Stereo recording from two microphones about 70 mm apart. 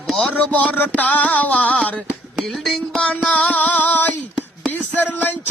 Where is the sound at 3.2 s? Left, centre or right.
Left.